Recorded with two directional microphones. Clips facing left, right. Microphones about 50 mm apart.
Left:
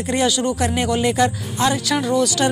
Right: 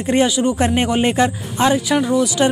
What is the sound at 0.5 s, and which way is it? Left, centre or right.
Speech, right.